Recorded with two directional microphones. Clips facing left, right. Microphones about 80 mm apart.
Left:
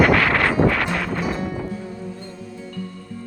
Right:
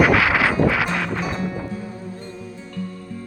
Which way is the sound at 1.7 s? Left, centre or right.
Right.